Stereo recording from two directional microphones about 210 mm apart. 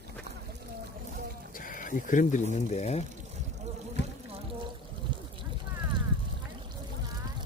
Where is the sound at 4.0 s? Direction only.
55° left (ahead or behind).